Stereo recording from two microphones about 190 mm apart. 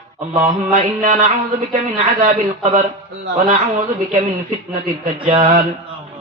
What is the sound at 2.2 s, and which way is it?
A man's voice, 35° right (ahead or behind).